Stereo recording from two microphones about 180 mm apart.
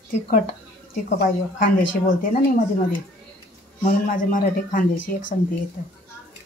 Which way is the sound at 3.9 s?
50° left (ahead or behind).